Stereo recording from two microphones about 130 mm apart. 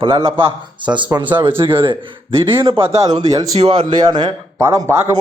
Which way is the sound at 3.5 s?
45° right (ahead or behind).